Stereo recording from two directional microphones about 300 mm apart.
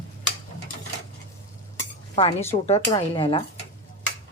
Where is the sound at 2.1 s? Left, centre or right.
Centre.